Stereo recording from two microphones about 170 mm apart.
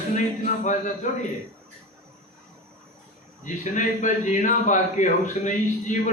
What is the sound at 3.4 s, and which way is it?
A man's voice, 45° left (ahead or behind).